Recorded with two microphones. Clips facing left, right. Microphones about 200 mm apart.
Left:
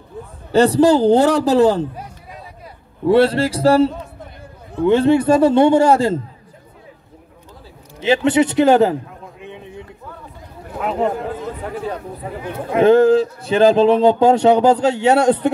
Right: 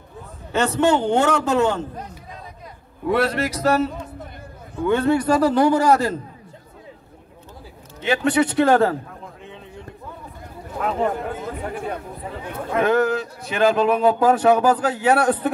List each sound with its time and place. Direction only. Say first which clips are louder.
0.5 s a man's voice: left 6 dB; 35° left (ahead or behind)
3.1 s a man's voice: left 7 dB; 30° left (ahead or behind)
8.0 s a man's voice: left 4 dB; 25° left (ahead or behind)
9.4 s a sound: left 5 dB; 15° left (ahead or behind)
11.0 s a man's voice: left 4 dB; 25° left (ahead or behind)
12.5 s a man's voice: left 7 dB; 30° left (ahead or behind)